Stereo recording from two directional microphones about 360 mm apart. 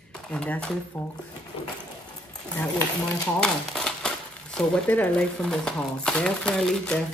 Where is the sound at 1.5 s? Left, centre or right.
Centre.